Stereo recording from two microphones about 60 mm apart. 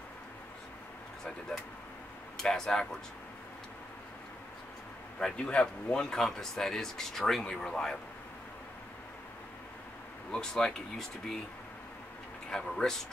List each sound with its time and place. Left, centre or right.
1.5 s speech: centre
5.2 s speech: centre
10.3 s speech: centre
12.4 s speech: centre